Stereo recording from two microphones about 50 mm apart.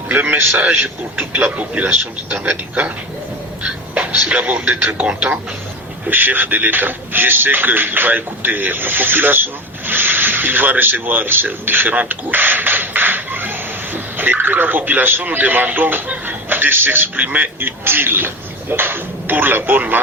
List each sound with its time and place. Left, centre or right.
0.1 s a man's voice: right
1.4 s a man's voice: right
3.6 s a sound: right
4.3 s a man's voice: right
6.1 s a man's voice: right